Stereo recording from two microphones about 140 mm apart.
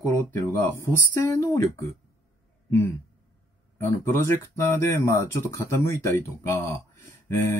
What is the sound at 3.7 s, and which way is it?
Speech, 20° left (ahead or behind).